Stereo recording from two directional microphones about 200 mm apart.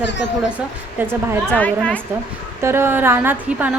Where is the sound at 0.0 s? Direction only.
60° left (ahead or behind).